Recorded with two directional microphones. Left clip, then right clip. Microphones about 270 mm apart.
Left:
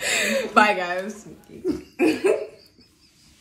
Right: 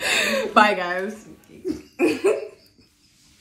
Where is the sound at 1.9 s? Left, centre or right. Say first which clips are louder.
Right 1 dB; centre.